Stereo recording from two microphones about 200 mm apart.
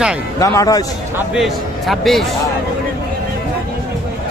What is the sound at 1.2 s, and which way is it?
A man's voice, centre (ahead or behind).